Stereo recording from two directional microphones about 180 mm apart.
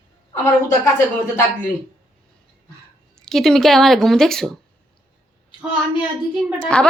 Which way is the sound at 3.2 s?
Centre (ahead or behind).